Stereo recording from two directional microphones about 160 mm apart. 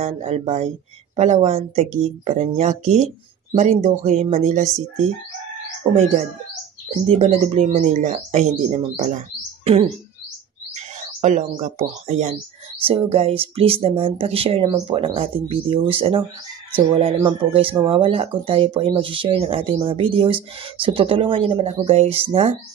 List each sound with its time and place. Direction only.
0.0 s speech: 45° right (ahead or behind)
7.1 s speech: 40° right (ahead or behind)
10.7 s speech: 45° right (ahead or behind)